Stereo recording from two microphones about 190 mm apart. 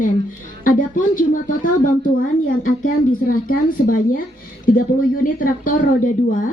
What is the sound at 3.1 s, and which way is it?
Speech, 50° left (ahead or behind).